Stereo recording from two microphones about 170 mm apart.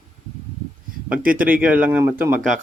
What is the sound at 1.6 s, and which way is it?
Speech, 10° right (ahead or behind).